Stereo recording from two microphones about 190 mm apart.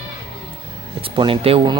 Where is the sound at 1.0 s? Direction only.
25° right (ahead or behind).